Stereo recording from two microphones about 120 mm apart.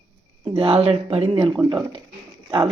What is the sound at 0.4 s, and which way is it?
Speech, 50° right (ahead or behind).